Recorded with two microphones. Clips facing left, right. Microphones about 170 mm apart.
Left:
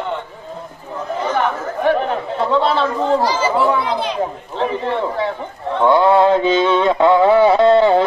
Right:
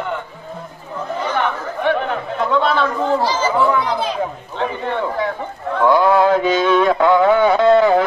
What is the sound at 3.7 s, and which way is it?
Speech, 30° left (ahead or behind).